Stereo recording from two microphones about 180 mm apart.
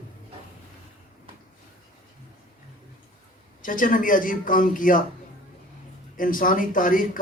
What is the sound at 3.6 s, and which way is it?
A man's voice, 50° left (ahead or behind).